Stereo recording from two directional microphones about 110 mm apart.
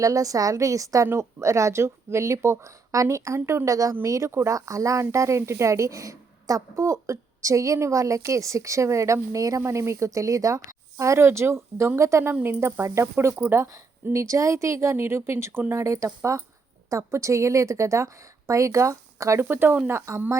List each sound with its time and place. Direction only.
0.0 s a woman's voice: 30° right (ahead or behind)